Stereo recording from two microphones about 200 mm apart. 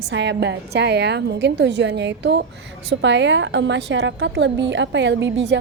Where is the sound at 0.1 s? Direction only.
60° right (ahead or behind).